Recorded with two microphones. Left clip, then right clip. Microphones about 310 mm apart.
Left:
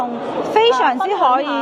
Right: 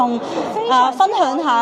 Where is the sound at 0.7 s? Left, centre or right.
Right.